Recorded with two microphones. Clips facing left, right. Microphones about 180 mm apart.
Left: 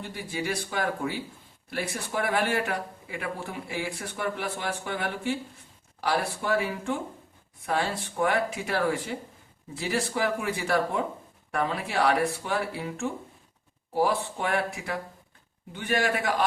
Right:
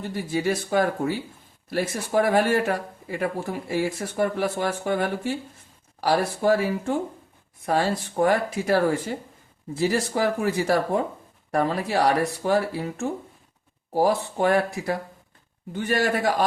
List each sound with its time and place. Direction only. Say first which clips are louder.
0.0 s speech: right 7 dB; 45° right (ahead or behind)